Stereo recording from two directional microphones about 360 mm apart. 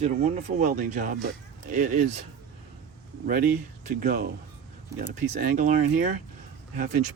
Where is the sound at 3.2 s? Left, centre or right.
Right.